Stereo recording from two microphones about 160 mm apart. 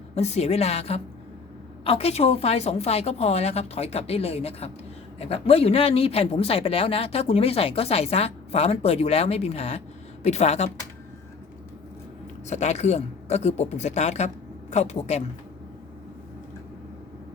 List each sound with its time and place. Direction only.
0.2 s speech: 45° left (ahead or behind)
12.5 s speech: 45° left (ahead or behind)